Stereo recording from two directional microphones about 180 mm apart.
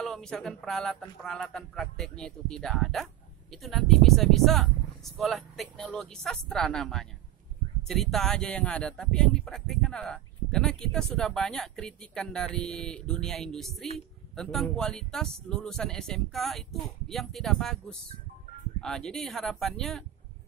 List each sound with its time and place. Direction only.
0.0 s speech: 5° left (ahead or behind)